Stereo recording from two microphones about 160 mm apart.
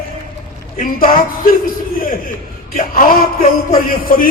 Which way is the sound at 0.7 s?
60° left (ahead or behind).